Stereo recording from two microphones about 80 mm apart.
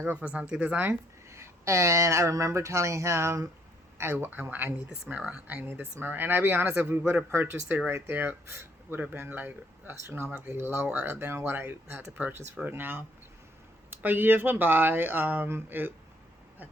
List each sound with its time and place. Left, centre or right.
0.0 s speech: centre
1.3 s speech: right
5.1 s speech: centre
5.6 s speech: right